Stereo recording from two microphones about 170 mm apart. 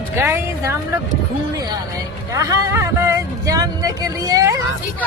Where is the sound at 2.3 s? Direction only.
20° right (ahead or behind).